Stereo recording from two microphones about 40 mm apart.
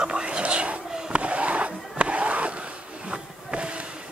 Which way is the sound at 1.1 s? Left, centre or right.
Right.